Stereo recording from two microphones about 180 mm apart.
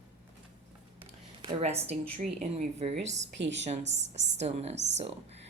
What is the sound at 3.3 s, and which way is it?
Speech, 80° right.